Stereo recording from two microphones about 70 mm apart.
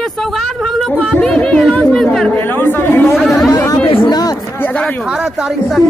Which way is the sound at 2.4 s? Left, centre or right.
Left.